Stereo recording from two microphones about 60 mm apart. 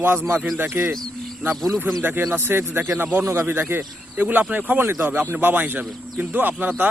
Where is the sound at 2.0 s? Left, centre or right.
Right.